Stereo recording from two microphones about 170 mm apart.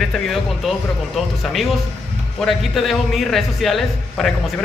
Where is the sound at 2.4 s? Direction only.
Centre (ahead or behind).